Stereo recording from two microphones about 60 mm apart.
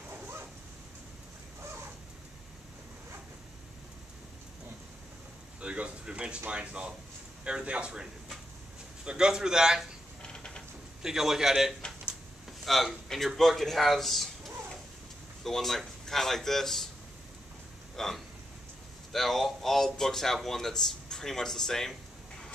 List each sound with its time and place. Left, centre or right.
5.6 s a sound: centre
6.5 s a man's voice: centre
10.2 s mechanisms: centre
11.0 s a man's voice: centre
15.4 s a man's voice: centre
17.9 s hiccup: centre
19.1 s speech: centre